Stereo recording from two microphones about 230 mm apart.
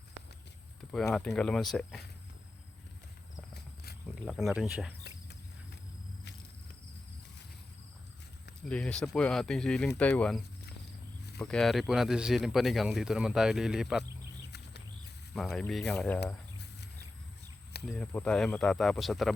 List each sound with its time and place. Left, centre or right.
0.9 s speech: centre
4.1 s speech: centre
8.6 s speech: centre
15.3 s speech: centre
16.2 s a sound: left
17.8 s speech: centre